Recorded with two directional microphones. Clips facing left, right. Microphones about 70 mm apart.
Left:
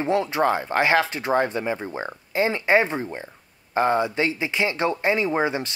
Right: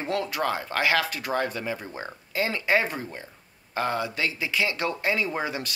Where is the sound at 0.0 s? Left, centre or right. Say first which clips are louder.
Left 6 dB; left.